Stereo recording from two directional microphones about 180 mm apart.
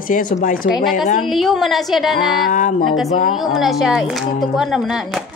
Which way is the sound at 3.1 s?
45° left (ahead or behind).